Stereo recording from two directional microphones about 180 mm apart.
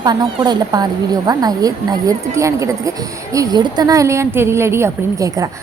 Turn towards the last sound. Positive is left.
turn(degrees=-15)  # may be behind; listen again after turning